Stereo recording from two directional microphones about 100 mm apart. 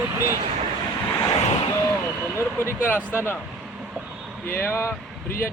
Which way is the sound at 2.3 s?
25° left (ahead or behind).